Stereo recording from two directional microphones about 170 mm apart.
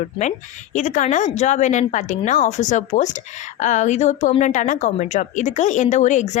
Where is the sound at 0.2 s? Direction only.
45° left (ahead or behind).